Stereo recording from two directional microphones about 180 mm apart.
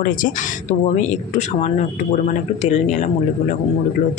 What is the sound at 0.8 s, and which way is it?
Speech, 40° left (ahead or behind).